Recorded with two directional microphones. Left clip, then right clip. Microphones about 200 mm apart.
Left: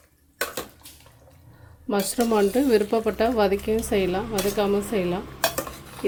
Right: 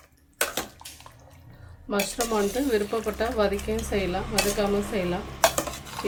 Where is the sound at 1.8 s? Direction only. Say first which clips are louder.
Left 3 dB; 45° left (ahead or behind).